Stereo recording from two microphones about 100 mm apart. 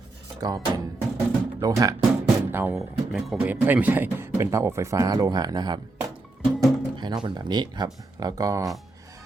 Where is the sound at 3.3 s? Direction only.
15° right (ahead or behind); by 5.7 s 40° right (ahead or behind).